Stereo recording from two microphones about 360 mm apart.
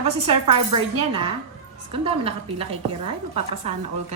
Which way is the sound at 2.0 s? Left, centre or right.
Centre.